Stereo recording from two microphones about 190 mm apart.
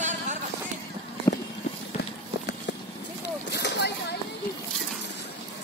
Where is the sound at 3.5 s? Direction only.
60° left (ahead or behind).